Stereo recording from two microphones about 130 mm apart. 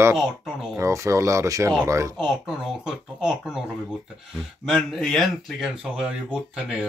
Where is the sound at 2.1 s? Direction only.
5° right (ahead or behind).